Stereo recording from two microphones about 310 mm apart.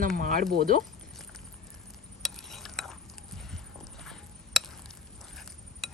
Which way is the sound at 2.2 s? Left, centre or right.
Centre.